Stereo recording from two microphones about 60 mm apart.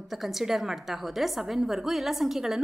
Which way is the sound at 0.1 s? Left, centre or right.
Centre.